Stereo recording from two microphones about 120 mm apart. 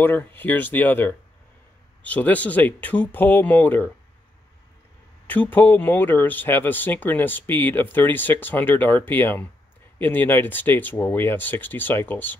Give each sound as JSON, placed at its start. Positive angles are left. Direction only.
{"t": 0.0, "sound": "speech", "side_deg": 15}
{"t": 5.2, "sound": "speech", "side_deg": 15}